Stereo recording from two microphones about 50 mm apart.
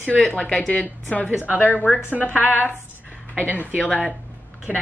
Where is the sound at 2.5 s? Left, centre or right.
Right.